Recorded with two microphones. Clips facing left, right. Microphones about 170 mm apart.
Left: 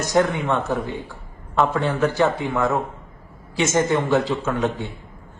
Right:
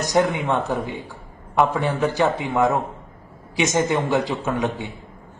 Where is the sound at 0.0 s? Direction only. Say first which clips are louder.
Even; 15° right (ahead or behind).